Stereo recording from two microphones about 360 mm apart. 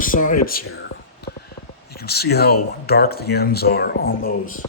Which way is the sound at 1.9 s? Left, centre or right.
Left.